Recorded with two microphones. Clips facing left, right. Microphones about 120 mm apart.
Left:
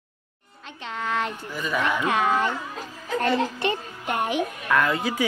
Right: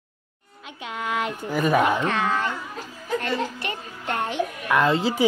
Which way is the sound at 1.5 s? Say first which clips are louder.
Right 9 dB; 55° right (ahead or behind).